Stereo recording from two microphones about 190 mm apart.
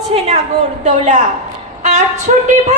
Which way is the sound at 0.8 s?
40° right (ahead or behind).